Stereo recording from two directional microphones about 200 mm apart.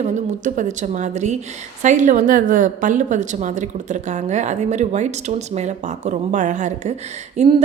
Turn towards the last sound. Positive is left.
turn(degrees=-35)  # may be behind; listen again after turning